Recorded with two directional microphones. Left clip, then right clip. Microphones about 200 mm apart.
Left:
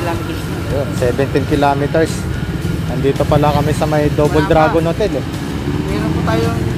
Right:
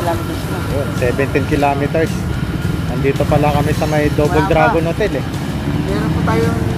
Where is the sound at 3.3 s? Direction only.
25° left (ahead or behind).